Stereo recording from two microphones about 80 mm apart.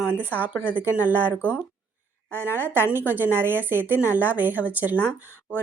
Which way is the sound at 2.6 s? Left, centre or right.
Right.